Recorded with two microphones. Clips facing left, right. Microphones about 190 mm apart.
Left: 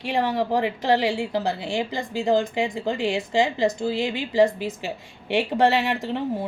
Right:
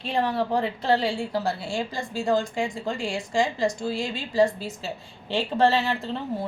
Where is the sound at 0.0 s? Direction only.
15° left (ahead or behind).